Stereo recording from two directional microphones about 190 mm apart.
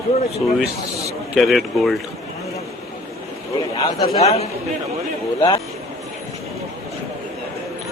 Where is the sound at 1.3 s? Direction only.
Centre (ahead or behind).